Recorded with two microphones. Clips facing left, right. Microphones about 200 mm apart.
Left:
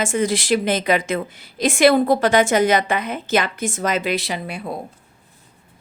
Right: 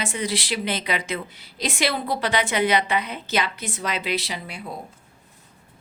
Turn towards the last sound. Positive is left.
turn(degrees=55)  # may be behind; listen again after turning